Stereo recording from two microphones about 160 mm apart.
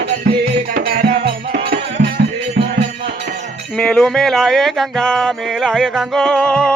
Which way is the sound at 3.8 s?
5° left (ahead or behind).